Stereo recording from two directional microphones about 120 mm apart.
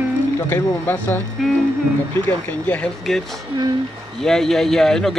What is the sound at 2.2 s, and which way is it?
Speech, 15° left (ahead or behind).